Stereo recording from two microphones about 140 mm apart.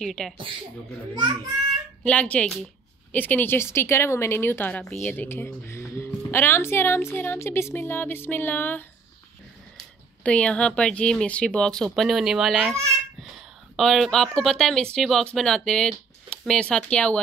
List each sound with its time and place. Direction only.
0.0 s speech: 5° left (ahead or behind)
2.0 s speech: 10° left (ahead or behind)
13.7 s speech: centre (ahead or behind)